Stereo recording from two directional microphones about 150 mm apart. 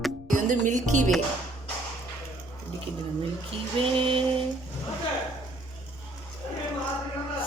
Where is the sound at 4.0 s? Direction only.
35° right (ahead or behind).